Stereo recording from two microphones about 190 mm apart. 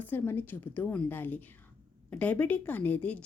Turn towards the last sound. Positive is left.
turn(degrees=5)  # may be behind; listen again after turning